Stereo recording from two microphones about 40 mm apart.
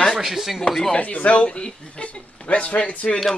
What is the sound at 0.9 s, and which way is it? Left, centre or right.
Speech, left.